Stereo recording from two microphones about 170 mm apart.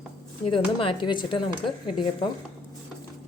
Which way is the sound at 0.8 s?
30° left (ahead or behind).